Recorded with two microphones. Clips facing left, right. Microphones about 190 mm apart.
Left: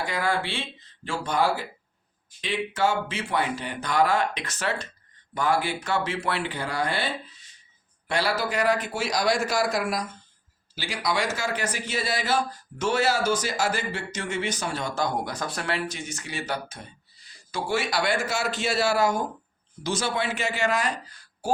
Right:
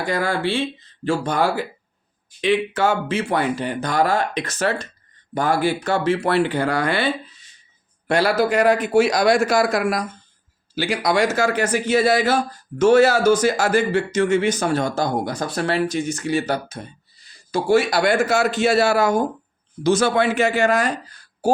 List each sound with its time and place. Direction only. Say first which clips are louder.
0.1 s speech: right 9 dB; 40° right (ahead or behind)
2.4 s speech: right 7 dB; 60° right (ahead or behind)
6.6 s speech: right 7 dB; 70° right (ahead or behind)
8.0 s a man's voice: right 8 dB; 50° right (ahead or behind); by 11.4 s 70° right (ahead or behind)
11.4 s speech: right 10 dB; 50° right (ahead or behind)